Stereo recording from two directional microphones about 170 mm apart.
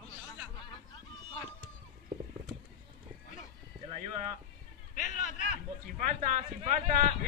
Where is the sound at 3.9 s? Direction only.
40° right (ahead or behind).